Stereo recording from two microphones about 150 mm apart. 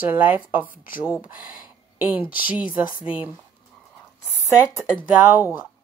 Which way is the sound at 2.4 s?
10° right (ahead or behind).